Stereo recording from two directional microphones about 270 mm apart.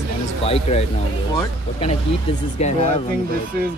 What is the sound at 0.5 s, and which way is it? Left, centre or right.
Speech, left.